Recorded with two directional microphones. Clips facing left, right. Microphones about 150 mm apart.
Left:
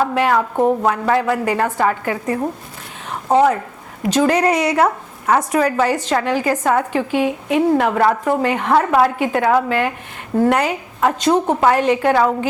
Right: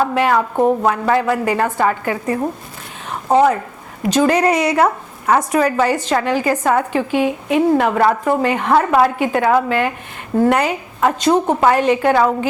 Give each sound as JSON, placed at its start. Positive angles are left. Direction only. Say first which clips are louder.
{"t": 0.0, "sound": "a woman's voice", "louder": "right 1 dB", "side_deg": -15}
{"t": 0.5, "sound": "speech", "louder": "right 1 dB", "side_deg": -30}
{"t": 0.9, "sound": "a woman's voice", "louder": "right 1 dB", "side_deg": -20}
{"t": 3.1, "sound": "a sound", "louder": "right 1 dB", "side_deg": -20}
{"t": 4.1, "sound": "a woman's voice", "louder": "right 1 dB", "side_deg": -15}